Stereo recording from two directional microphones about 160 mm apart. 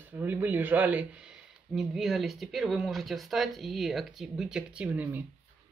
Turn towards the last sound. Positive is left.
turn(degrees=-10)  # may be behind; listen again after turning